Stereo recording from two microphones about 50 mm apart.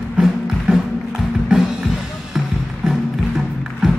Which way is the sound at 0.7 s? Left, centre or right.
Centre.